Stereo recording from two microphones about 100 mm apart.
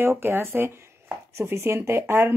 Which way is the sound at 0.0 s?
20° right (ahead or behind).